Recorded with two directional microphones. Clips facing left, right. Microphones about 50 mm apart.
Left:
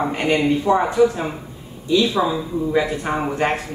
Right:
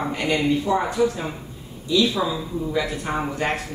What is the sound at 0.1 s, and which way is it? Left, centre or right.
Speech, left.